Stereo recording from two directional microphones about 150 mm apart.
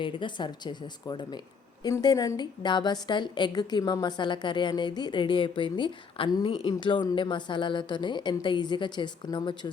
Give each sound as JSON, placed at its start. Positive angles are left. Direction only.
{"t": 0.0, "sound": "a woman's voice", "side_deg": 35}